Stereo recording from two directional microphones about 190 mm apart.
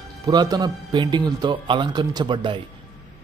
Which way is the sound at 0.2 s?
20° right (ahead or behind).